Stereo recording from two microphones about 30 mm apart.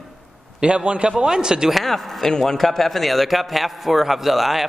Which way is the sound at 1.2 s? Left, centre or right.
Right.